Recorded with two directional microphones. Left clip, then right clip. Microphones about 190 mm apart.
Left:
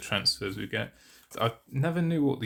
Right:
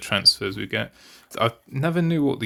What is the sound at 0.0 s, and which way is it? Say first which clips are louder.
Speech: right 9 dB; 35° right (ahead or behind).